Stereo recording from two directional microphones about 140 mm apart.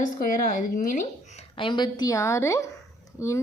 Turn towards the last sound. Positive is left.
turn(degrees=20)  # may be behind; listen again after turning